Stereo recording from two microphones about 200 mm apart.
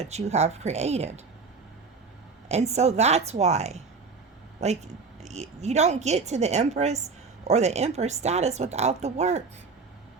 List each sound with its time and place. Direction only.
0.0 s speech: 35° right (ahead or behind)
2.5 s speech: 35° right (ahead or behind)